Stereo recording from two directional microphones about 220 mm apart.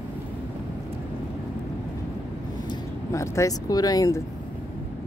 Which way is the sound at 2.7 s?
15° left (ahead or behind).